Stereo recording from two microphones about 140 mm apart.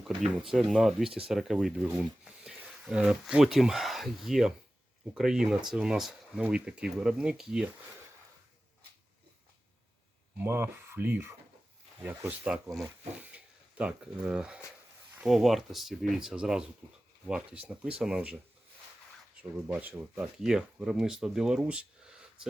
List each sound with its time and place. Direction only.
0.2 s speech: 5° right (ahead or behind)
10.3 s speech: 15° right (ahead or behind)
12.5 s speech: 10° right (ahead or behind)
19.5 s speech: 15° right (ahead or behind)
20.1 s speech: 5° right (ahead or behind)